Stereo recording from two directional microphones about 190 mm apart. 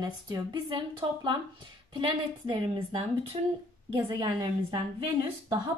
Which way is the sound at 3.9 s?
20° right (ahead or behind).